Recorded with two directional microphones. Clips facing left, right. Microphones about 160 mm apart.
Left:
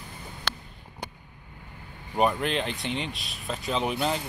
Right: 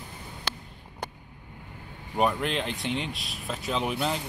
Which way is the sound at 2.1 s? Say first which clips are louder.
Left 1 dB; centre (ahead or behind).